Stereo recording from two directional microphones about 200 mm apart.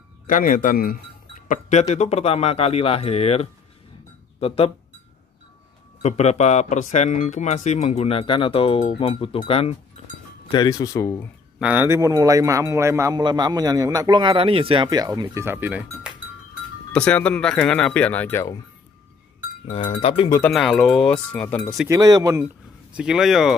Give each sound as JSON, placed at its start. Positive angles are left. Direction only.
{"t": 0.3, "sound": "speech", "side_deg": 45}
{"t": 1.5, "sound": "speech", "side_deg": 35}
{"t": 6.0, "sound": "speech", "side_deg": 35}
{"t": 11.6, "sound": "a man's voice", "side_deg": -10}
{"t": 16.9, "sound": "speech", "side_deg": 5}
{"t": 19.9, "sound": "speech", "side_deg": 30}
{"t": 20.5, "sound": "speech", "side_deg": 0}
{"t": 21.8, "sound": "a man's voice", "side_deg": -15}
{"t": 22.9, "sound": "speech", "side_deg": 0}